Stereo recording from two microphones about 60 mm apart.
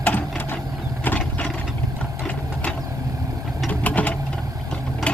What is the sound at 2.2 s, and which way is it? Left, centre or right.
Engine, left.